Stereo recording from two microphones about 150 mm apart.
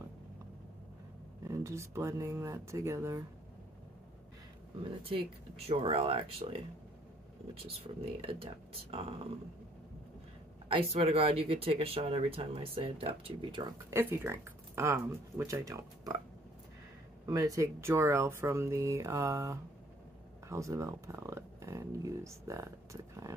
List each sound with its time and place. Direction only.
1.5 s speech: 20° right (ahead or behind)
5.7 s speech: 40° right (ahead or behind)
7.8 s speech: 40° right (ahead or behind)
10.7 s speech: 40° right (ahead or behind)
13.9 s speech: 15° right (ahead or behind)
17.3 s speech: 25° right (ahead or behind)